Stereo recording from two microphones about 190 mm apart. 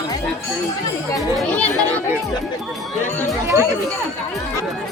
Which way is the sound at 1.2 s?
5° left (ahead or behind).